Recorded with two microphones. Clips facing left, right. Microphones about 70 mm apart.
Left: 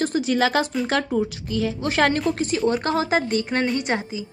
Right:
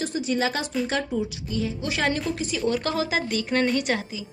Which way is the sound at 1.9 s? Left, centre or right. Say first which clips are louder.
Left 6 dB; left.